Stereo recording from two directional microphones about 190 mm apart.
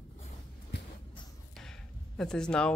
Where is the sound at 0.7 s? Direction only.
65° left (ahead or behind).